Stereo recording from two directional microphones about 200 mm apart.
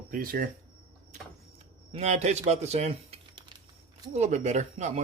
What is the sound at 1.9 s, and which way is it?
Speech, 35° right (ahead or behind).